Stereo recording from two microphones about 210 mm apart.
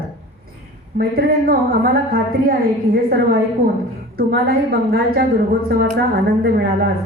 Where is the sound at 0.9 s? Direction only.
45° right (ahead or behind).